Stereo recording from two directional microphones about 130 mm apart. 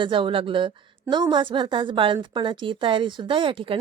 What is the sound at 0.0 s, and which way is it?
Speech, 40° right (ahead or behind).